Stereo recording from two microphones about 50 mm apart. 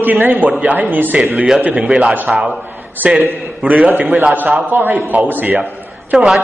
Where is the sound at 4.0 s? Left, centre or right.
Right.